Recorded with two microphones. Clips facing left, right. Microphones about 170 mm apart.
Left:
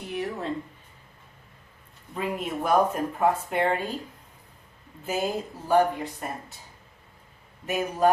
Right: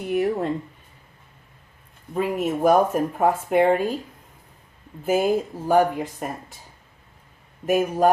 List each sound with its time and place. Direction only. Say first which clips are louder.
0.1 s a sound: right 9 dB; 55° right (ahead or behind)
2.1 s speech: right 6 dB; 45° right (ahead or behind)
5.0 s speech: right 8 dB; 50° right (ahead or behind)
7.7 s speech: right 4 dB; 50° right (ahead or behind)